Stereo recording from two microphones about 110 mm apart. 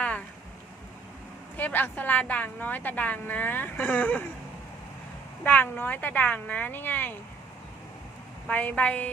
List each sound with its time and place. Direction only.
0.0 s a sound: 10° left (ahead or behind)
1.5 s a woman's voice: 15° left (ahead or behind)
5.4 s a woman's voice: 15° left (ahead or behind)
8.4 s a woman's voice: 10° left (ahead or behind)